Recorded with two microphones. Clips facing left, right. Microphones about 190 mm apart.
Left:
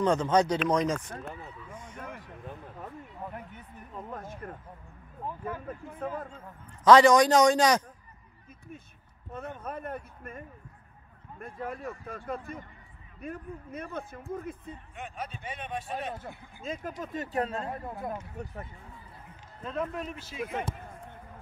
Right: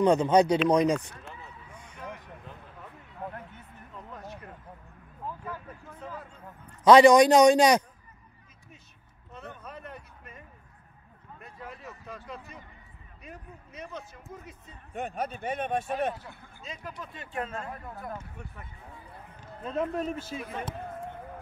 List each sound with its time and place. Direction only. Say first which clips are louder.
0.0 s a man's voice: right 3 dB; 15° right (ahead or behind)
1.1 s a sound: left 6 dB; 50° left (ahead or behind)
4.1 s a sound: left 2 dB; 50° left (ahead or behind)
5.9 s a man's voice: left 6 dB; 50° left (ahead or behind)
6.9 s a man's voice: right 3 dB; 15° right (ahead or behind)
9.3 s a sound: left 5 dB; 50° left (ahead or behind)
11.3 s a man's voice: left 7 dB; 50° left (ahead or behind)
15.0 s speech: right 8 dB; 40° right (ahead or behind)
16.2 s a man's voice: left 4 dB; 50° left (ahead or behind); by 18.1 s 25° left (ahead or behind)
18.4 s speech: left 6 dB; 40° left (ahead or behind)
19.7 s speech: right 4 dB; 40° right (ahead or behind)